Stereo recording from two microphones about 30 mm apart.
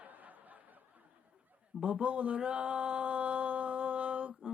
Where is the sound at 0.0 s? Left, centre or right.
Right.